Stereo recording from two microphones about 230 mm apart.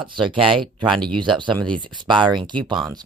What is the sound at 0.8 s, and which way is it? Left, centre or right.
Speech, centre.